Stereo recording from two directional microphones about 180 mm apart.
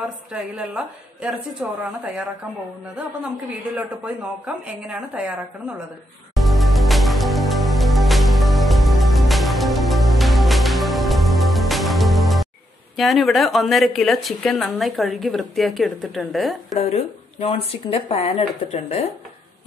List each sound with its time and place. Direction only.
0.3 s a woman's voice: 5° right (ahead or behind)
3.7 s a woman's voice: 5° right (ahead or behind)
6.3 s music: centre (ahead or behind)
12.9 s speech: centre (ahead or behind)
16.7 s speech: 35° left (ahead or behind)